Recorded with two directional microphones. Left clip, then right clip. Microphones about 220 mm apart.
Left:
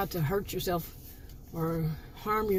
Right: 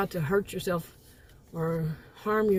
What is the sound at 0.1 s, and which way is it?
A woman's voice, 25° right (ahead or behind).